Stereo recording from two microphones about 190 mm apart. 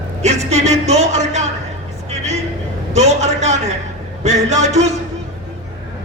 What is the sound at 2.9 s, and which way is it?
A man's voice, 35° right (ahead or behind).